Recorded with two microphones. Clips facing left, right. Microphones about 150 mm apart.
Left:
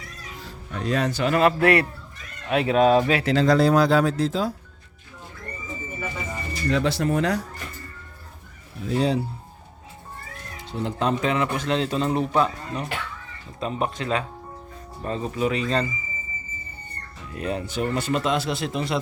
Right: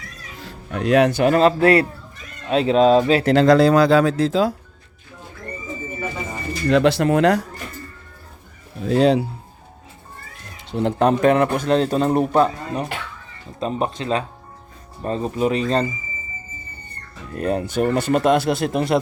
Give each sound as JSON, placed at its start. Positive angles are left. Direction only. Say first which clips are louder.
{"t": 0.3, "sound": "music", "louder": "right 6 dB", "side_deg": -65}
{"t": 1.3, "sound": "speech", "louder": "even", "side_deg": -30}
{"t": 3.2, "sound": "speech", "louder": "right 7 dB", "side_deg": -75}
{"t": 6.5, "sound": "speech", "louder": "right 7 dB", "side_deg": -80}
{"t": 8.8, "sound": "speech", "louder": "right 7 dB", "side_deg": -90}
{"t": 10.7, "sound": "speech", "louder": "right 7 dB", "side_deg": -65}
{"t": 17.3, "sound": "speech", "louder": "right 6 dB", "side_deg": -45}